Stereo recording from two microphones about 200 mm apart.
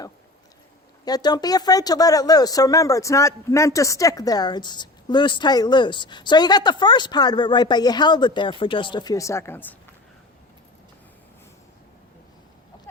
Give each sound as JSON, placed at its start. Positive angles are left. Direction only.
{"t": 1.0, "sound": "speech", "side_deg": 20}